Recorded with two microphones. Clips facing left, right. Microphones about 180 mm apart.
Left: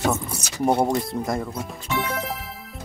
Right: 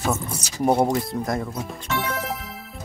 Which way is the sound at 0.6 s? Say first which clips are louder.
Right 1 dB; centre (ahead or behind).